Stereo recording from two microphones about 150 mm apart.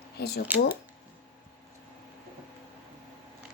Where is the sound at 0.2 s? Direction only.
90° left.